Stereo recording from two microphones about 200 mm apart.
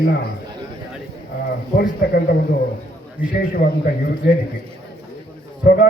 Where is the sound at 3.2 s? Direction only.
10° right (ahead or behind).